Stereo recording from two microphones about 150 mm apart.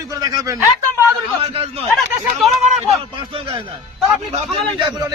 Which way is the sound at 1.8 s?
Centre (ahead or behind).